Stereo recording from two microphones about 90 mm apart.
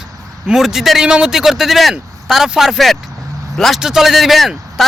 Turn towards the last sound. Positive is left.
turn(degrees=0)  # may be behind; listen again after turning